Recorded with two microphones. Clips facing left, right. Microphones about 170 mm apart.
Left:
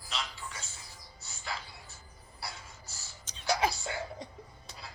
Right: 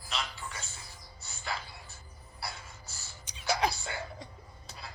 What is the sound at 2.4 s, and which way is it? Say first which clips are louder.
Gasp: right 2 dB; 60° right (ahead or behind).